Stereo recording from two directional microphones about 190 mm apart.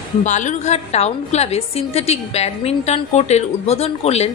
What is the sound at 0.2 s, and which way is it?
A woman's voice, 40° left (ahead or behind).